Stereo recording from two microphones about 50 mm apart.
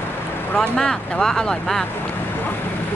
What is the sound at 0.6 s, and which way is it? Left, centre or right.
Speech, centre.